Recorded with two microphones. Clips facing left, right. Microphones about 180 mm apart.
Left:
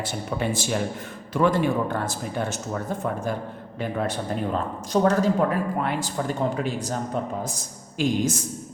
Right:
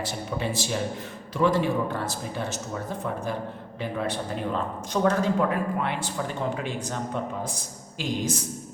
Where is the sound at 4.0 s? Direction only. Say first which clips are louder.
Left 2 dB; 40° left (ahead or behind).